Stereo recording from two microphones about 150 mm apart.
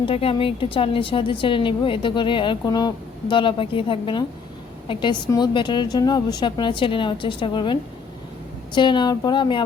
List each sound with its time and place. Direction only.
0.0 s a woman's voice: 40° left (ahead or behind)